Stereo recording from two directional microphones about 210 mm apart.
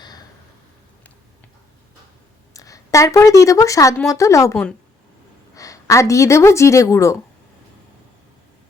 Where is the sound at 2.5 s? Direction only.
15° left (ahead or behind).